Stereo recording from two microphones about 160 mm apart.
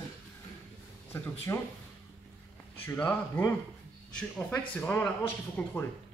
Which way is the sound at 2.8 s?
10° left (ahead or behind).